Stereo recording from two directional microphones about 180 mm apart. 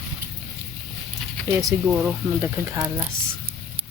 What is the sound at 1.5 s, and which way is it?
Speech, 15° right (ahead or behind).